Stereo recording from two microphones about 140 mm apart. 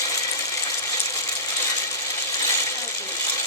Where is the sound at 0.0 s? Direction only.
25° left (ahead or behind).